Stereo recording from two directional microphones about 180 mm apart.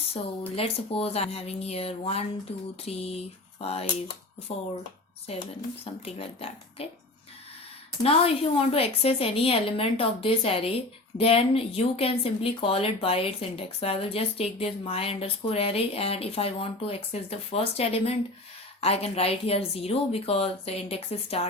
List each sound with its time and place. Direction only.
0.1 s speech: 30° left (ahead or behind)
8.0 s speech: 30° left (ahead or behind)